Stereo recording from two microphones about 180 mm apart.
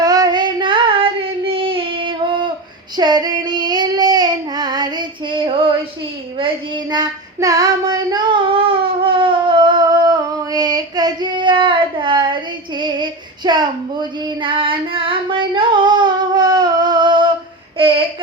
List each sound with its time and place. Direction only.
0.0 s child singing: 20° right (ahead or behind)
6.9 s child singing: 20° right (ahead or behind)